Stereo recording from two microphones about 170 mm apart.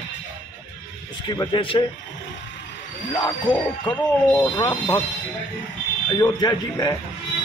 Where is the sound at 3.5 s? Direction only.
10° left (ahead or behind).